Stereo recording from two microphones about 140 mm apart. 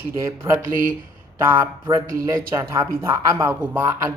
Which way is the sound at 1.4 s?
15° right (ahead or behind).